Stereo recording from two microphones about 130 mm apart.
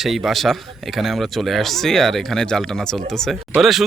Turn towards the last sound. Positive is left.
turn(degrees=0)  # may be behind; listen again after turning